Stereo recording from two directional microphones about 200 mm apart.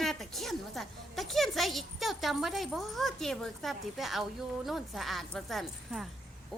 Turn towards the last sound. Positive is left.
turn(degrees=0)  # may be behind; listen again after turning